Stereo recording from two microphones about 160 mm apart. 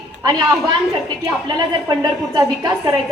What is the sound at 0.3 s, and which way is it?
A woman's voice, 25° right (ahead or behind).